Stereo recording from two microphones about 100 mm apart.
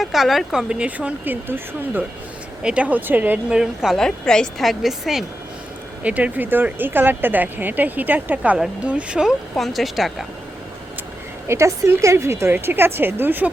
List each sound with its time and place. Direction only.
0.0 s speech: centre (ahead or behind)
3.6 s speech: 5° right (ahead or behind)
6.0 s speech: 15° right (ahead or behind)
11.4 s speech: 25° right (ahead or behind)